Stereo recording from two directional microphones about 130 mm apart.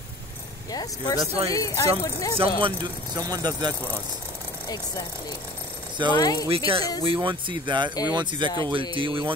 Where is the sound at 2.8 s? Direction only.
30° right (ahead or behind).